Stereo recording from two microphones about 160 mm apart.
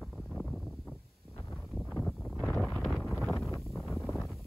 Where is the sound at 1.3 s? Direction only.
15° left (ahead or behind).